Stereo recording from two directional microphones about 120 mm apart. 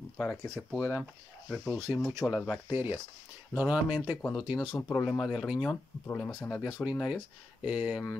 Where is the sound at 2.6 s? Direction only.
15° right (ahead or behind).